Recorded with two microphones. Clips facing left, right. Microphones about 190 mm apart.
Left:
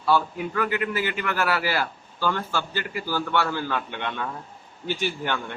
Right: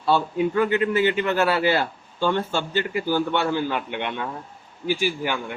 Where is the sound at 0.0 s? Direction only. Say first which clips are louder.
Right 2 dB; 25° right (ahead or behind).